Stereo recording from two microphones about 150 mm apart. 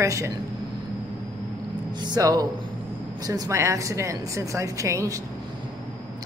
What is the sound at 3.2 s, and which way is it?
Speech, 25° right (ahead or behind).